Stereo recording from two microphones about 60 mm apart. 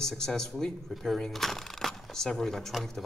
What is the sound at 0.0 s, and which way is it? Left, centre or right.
Speech, centre.